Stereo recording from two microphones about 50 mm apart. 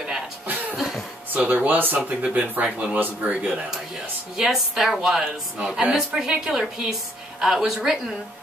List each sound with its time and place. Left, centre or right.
0.7 s cough: centre
1.5 s speech: right
2.0 s a woman's voice: centre
2.3 s speech: right
4.4 s a woman's voice: centre
5.6 s speech: right
5.9 s a woman's voice: centre